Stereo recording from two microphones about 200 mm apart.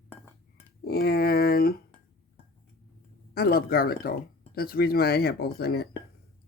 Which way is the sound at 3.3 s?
50° left (ahead or behind).